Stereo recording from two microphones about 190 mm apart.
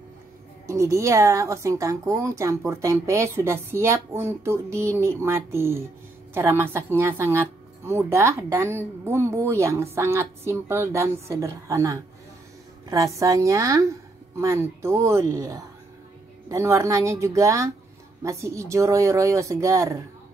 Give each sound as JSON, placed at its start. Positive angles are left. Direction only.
{"t": 0.7, "sound": "speech", "side_deg": -15}